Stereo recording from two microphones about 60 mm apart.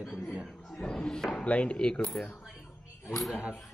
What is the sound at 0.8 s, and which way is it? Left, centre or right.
Speech, centre.